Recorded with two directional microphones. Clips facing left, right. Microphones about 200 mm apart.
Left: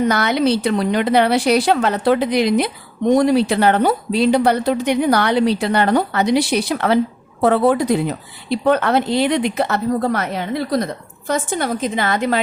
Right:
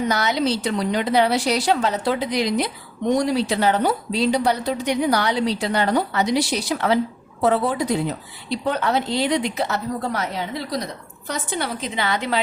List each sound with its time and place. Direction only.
0.1 s a woman's voice: 60° left (ahead or behind)